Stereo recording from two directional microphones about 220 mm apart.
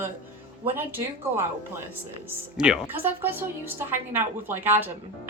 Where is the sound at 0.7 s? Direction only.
10° right (ahead or behind).